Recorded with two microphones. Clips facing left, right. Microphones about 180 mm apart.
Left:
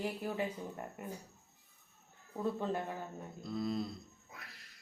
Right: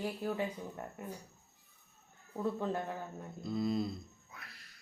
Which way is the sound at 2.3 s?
10° left (ahead or behind).